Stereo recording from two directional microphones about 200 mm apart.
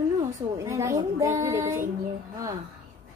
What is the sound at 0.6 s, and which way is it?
A child's voice, 15° right (ahead or behind).